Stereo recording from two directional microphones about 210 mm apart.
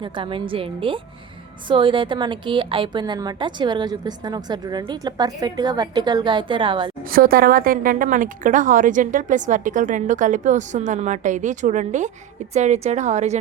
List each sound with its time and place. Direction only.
0.0 s a woman's voice: 25° right (ahead or behind)
7.1 s a woman's voice: 45° right (ahead or behind)